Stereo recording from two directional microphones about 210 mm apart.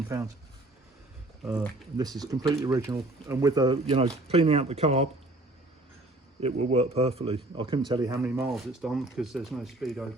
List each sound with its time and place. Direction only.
0.1 s speech: 15° right (ahead or behind)
1.4 s speech: centre (ahead or behind)
2.2 s a man's voice: 20° right (ahead or behind)
6.4 s a man's voice: 30° right (ahead or behind); by 8.4 s 15° right (ahead or behind)
8.4 s speech: centre (ahead or behind)